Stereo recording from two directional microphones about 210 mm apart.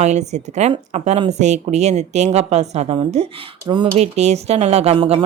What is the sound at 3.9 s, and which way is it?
Speech, 30° right (ahead or behind).